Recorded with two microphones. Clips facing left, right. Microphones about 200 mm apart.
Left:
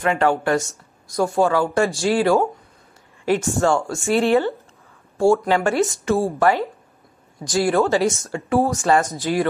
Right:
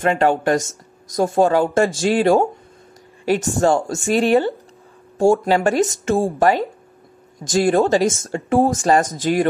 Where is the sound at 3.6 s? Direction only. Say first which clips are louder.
Right 2 dB; 40° right (ahead or behind).